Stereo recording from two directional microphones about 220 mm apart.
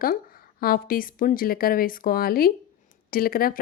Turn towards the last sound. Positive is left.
turn(degrees=40)  # may be behind; listen again after turning